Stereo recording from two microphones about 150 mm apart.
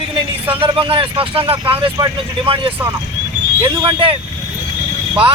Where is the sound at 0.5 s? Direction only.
35° right (ahead or behind).